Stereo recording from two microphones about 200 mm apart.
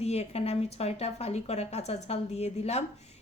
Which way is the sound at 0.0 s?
30° left (ahead or behind).